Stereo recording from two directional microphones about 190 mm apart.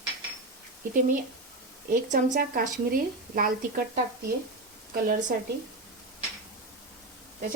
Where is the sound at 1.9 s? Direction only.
45° right (ahead or behind).